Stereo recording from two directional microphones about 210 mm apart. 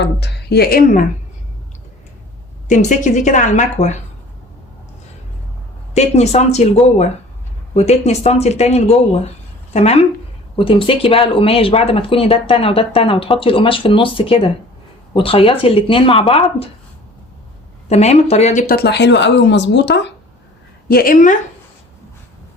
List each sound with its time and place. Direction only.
0.0 s speech: 55° left (ahead or behind)
2.6 s a woman's voice: 35° left (ahead or behind)
5.9 s a woman's voice: 30° left (ahead or behind)
7.7 s a woman's voice: 30° left (ahead or behind)
17.8 s speech: 30° left (ahead or behind); by 20.1 s 55° left (ahead or behind)
20.8 s speech: 45° left (ahead or behind)